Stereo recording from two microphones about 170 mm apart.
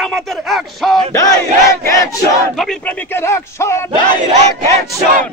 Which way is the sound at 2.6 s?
5° left (ahead or behind).